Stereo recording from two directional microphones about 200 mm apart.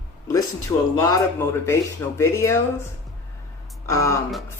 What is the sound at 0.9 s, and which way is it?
Speech, 20° left (ahead or behind).